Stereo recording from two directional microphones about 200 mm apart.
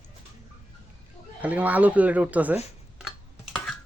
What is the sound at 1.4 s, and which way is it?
Speech, 10° right (ahead or behind).